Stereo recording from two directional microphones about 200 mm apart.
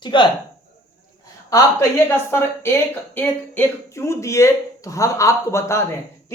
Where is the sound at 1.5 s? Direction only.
15° left (ahead or behind).